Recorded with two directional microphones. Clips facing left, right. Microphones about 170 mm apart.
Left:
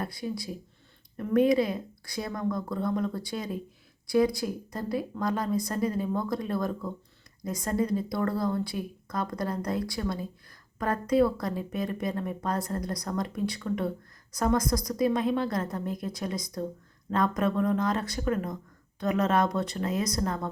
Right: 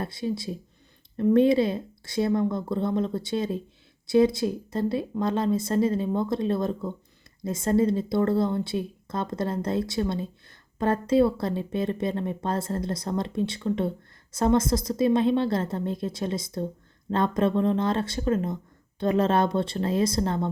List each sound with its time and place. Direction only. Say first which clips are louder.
0.0 s speech: right 4 dB; 25° right (ahead or behind)